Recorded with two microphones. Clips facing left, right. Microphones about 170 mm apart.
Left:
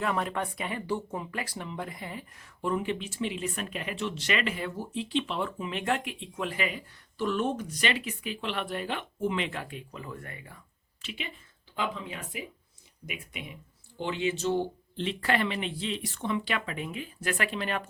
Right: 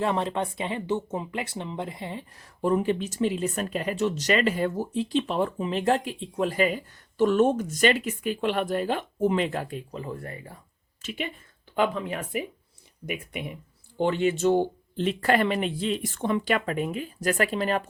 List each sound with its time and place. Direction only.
0.0 s speech: 25° right (ahead or behind)
11.0 s a woman's voice: 50° right (ahead or behind)